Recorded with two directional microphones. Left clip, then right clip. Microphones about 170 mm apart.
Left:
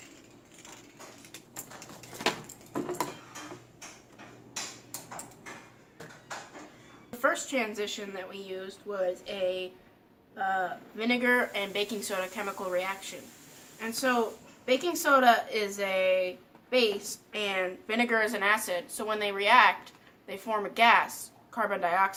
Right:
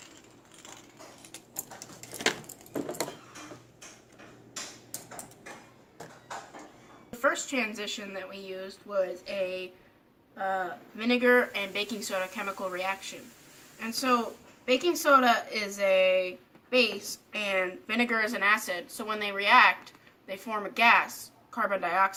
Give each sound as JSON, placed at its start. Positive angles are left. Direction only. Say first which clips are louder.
{"t": 7.2, "sound": "a woman's voice", "louder": "even", "side_deg": 10}